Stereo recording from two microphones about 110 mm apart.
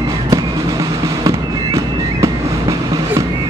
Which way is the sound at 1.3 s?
30° right (ahead or behind).